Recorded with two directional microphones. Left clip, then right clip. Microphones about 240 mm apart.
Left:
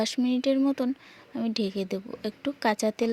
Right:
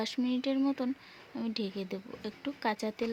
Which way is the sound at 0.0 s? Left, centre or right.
Left.